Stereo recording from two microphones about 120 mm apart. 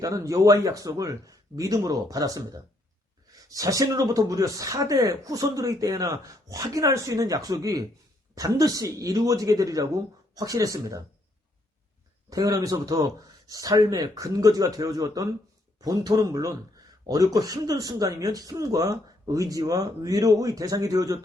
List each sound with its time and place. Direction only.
0.0 s speech: 30° right (ahead or behind)
12.3 s speech: 30° right (ahead or behind)